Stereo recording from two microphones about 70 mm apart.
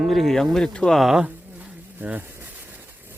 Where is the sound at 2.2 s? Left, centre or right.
Right.